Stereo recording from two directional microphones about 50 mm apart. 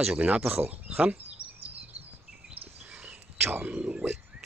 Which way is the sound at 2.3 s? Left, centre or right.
Centre.